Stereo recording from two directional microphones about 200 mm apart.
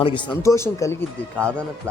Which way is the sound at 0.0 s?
25° left (ahead or behind).